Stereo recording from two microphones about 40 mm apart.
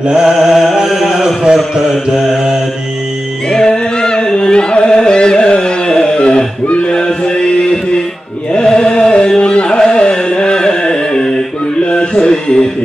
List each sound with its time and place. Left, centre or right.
0.0 s mantra: centre
0.3 s music: centre
2.1 s mantra: centre
3.4 s chant: centre
6.1 s a sound: left
8.6 s chant: left
9.4 s carnatic music: left
11.8 s a sound: left
12.1 s music: centre